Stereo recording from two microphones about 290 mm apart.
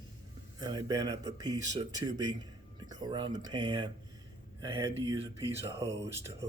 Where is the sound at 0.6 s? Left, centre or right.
Centre.